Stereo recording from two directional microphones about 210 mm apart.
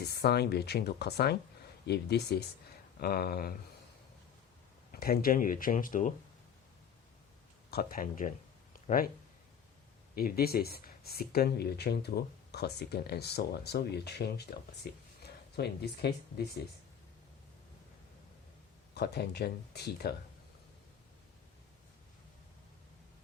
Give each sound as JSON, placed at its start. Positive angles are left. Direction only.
{"t": 0.0, "sound": "speech", "side_deg": 50}
{"t": 4.9, "sound": "speech", "side_deg": 45}
{"t": 7.7, "sound": "speech", "side_deg": 45}
{"t": 8.7, "sound": "a sound", "side_deg": 40}
{"t": 10.2, "sound": "speech", "side_deg": 45}
{"t": 18.9, "sound": "speech", "side_deg": 50}